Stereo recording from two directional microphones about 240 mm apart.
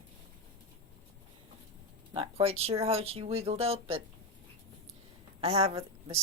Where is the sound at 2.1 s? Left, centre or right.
Right.